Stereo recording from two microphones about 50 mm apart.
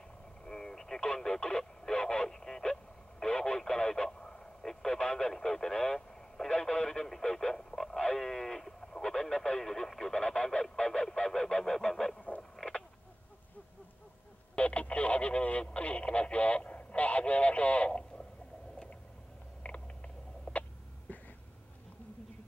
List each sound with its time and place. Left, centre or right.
0.5 s radio: centre
6.6 s speech: centre
14.6 s speech: left
19.6 s a sound: left
20.5 s cough: left
21.1 s a sound: left